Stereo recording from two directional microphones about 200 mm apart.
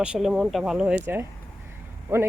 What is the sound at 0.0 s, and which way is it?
Speech, 5° right (ahead or behind).